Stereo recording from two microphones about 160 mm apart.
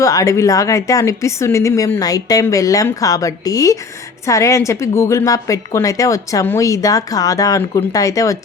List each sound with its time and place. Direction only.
0.0 s a woman's voice: 20° left (ahead or behind)